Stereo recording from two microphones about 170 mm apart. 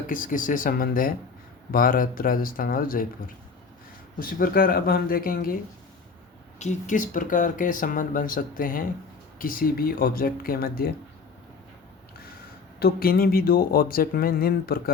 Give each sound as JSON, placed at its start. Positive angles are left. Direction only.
{"t": 0.1, "sound": "speech", "side_deg": 50}
{"t": 6.6, "sound": "speech", "side_deg": 45}
{"t": 12.8, "sound": "speech", "side_deg": 60}